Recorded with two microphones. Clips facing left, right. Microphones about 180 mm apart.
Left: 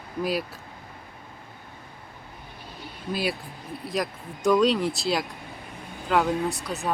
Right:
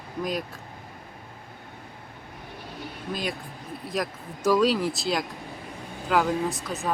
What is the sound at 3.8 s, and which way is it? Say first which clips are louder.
Speech: left 1 dB; centre (ahead or behind).